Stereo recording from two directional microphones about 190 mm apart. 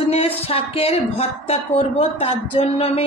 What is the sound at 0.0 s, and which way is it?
Speech, 35° left (ahead or behind).